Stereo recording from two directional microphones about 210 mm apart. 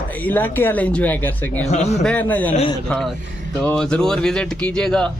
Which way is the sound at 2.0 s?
5° left (ahead or behind).